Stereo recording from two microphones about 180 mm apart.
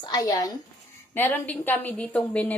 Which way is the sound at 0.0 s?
20° left (ahead or behind).